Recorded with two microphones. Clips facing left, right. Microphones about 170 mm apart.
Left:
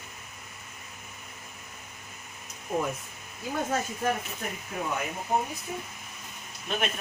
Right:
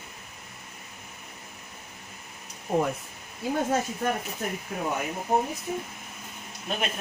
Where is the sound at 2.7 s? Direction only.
30° right (ahead or behind).